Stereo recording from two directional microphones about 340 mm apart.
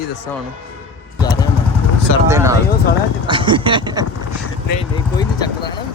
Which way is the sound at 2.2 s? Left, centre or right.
Centre.